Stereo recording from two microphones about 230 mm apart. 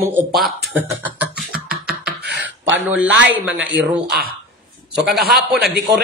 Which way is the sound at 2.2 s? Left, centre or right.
Right.